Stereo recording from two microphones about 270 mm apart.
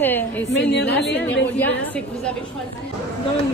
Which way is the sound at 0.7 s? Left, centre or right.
Left.